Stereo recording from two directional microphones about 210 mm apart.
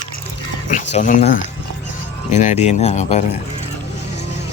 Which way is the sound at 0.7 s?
35° left (ahead or behind).